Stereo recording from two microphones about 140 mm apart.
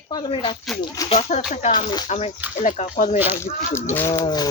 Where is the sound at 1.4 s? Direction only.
60° left (ahead or behind).